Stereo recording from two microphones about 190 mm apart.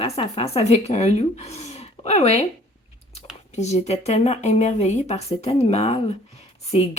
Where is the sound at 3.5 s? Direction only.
35° left (ahead or behind).